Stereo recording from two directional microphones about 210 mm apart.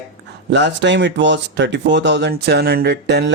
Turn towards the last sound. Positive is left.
turn(degrees=-55)  # may be behind; listen again after turning